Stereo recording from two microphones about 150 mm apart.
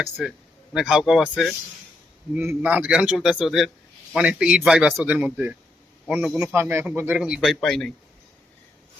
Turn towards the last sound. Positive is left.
turn(degrees=5)  # may be behind; listen again after turning